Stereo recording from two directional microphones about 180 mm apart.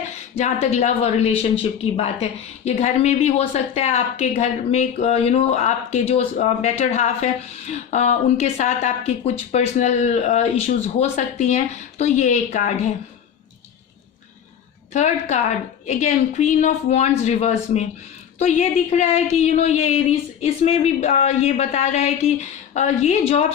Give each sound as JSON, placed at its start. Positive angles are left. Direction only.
{"t": 0.3, "sound": "a woman's voice", "side_deg": 35}
{"t": 14.9, "sound": "a woman's voice", "side_deg": 40}